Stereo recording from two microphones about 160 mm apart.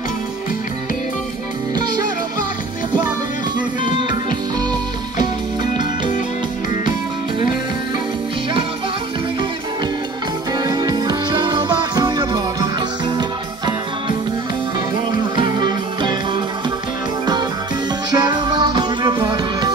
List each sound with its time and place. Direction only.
1.8 s music: 25° right (ahead or behind)
3.5 s music: 30° right (ahead or behind)
10.6 s music: 25° right (ahead or behind)
15.3 s music: 25° right (ahead or behind)
18.1 s music: 25° right (ahead or behind)